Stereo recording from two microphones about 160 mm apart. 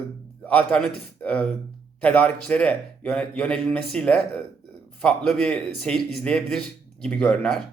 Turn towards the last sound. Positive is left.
turn(degrees=5)  # may be behind; listen again after turning